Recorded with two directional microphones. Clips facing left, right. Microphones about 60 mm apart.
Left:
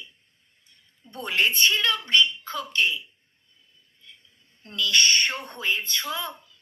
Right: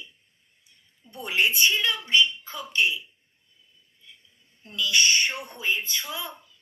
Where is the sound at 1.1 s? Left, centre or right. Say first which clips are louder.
Even; centre.